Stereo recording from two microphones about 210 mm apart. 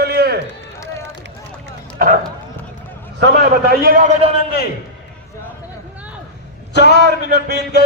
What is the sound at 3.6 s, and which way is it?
Speech, 45° right (ahead or behind).